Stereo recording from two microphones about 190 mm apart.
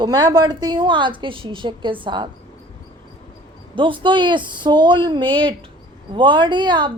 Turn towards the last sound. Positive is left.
turn(degrees=-25)  # may be behind; listen again after turning